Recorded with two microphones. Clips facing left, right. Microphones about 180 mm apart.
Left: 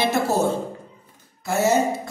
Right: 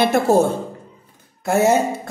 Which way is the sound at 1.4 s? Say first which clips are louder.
Right 4 dB; 55° right (ahead or behind).